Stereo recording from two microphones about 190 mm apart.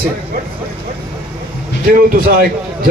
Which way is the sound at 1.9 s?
50° right (ahead or behind).